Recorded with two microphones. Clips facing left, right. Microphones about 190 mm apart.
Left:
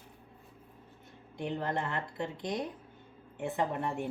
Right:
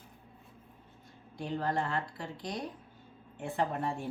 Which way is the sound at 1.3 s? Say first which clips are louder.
Right 1 dB; 20° left (ahead or behind).